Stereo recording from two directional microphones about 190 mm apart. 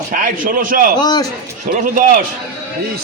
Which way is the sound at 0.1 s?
45° right (ahead or behind).